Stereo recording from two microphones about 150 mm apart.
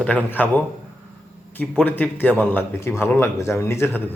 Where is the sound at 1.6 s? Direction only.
10° left (ahead or behind).